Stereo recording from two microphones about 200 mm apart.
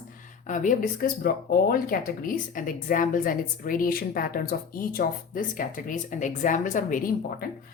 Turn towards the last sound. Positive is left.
turn(degrees=45)  # may be behind; listen again after turning